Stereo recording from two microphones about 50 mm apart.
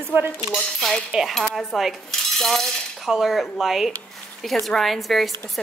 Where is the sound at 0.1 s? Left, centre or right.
Right.